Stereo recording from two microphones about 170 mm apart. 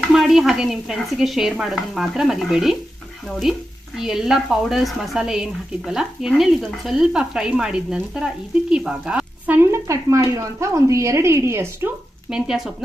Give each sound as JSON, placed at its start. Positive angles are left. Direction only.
{"t": 0.1, "sound": "a woman's voice", "side_deg": 0}
{"t": 12.3, "sound": "a woman's voice", "side_deg": -5}